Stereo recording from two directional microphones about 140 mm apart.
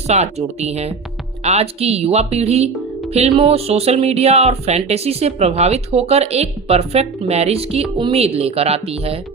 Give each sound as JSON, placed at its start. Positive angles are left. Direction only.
{"t": 0.1, "sound": "speech", "side_deg": -50}